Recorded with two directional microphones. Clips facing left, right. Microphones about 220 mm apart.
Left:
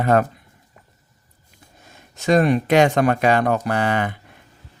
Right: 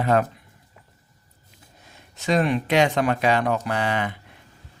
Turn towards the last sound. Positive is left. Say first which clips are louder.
# left 4 dB
turn(degrees=50)  # may be behind; listen again after turning